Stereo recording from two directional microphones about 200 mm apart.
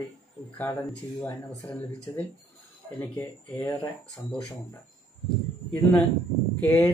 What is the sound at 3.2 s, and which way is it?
Speech, 10° left (ahead or behind).